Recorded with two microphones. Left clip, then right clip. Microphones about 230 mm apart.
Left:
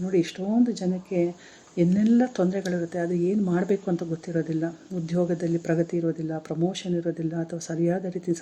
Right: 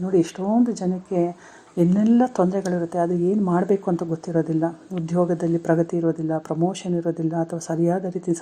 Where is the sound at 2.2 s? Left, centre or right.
Right.